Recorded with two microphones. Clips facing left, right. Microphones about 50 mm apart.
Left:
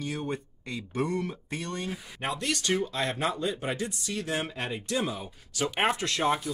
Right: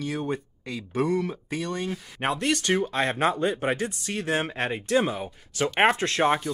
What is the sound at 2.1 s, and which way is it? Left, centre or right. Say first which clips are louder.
Speech: right 6 dB; right.